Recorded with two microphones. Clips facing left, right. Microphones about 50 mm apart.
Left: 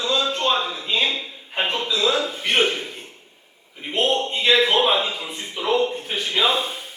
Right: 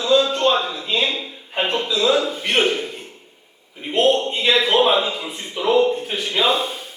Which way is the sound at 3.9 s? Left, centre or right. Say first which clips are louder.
Right 4 dB; centre.